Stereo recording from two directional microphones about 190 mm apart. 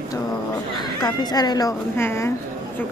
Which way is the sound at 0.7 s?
20° left (ahead or behind).